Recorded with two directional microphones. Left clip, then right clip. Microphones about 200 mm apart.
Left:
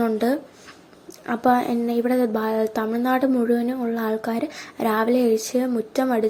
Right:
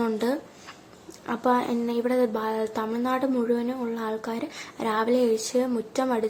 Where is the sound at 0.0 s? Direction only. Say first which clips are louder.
Left 4 dB; 10° left (ahead or behind).